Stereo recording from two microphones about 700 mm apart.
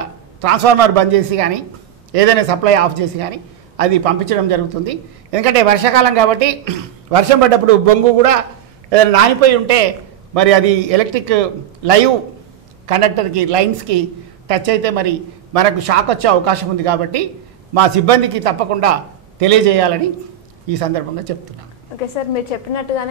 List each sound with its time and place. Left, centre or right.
0.4 s a man's voice: right